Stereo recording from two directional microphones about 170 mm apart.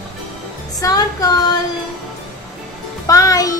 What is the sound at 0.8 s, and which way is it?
Female singing, 20° left (ahead or behind).